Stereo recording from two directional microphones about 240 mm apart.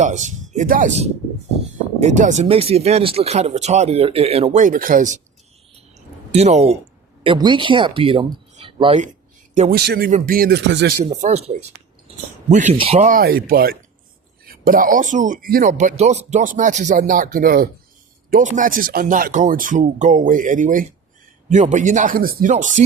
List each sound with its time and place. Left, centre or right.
0.0 s speech: right
6.3 s speech: right
9.6 s speech: right
11.0 s speech: right